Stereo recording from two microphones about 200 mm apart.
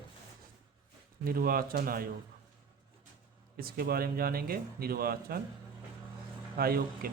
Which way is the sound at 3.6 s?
50° right (ahead or behind).